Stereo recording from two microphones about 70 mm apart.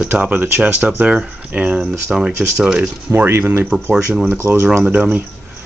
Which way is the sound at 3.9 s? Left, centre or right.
Centre.